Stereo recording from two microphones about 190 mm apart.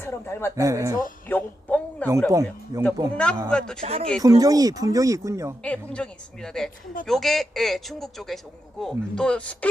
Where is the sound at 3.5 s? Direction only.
5° left (ahead or behind).